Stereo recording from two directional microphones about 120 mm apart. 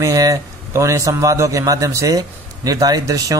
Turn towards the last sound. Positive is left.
turn(degrees=-30)  # may be behind; listen again after turning